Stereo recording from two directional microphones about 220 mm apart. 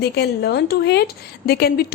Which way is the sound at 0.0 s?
45° left (ahead or behind).